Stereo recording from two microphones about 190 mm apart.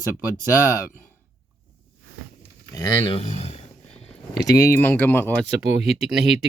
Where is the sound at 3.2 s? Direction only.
30° left (ahead or behind).